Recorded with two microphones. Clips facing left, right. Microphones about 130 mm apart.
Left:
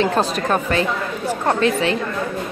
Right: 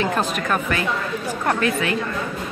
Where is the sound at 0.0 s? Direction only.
35° left (ahead or behind).